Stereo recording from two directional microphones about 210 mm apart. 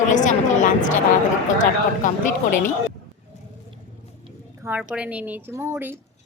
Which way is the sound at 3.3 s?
35° left (ahead or behind).